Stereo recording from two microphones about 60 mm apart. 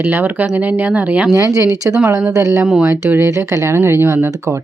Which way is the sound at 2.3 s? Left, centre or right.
Right.